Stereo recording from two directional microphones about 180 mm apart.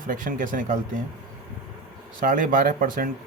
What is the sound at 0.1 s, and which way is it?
Speech, 50° right (ahead or behind).